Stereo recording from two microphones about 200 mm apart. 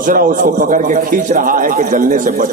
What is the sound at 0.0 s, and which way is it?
A man's voice, 45° right (ahead or behind).